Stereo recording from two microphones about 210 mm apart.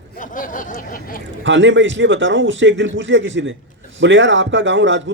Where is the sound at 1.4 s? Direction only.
60° right (ahead or behind).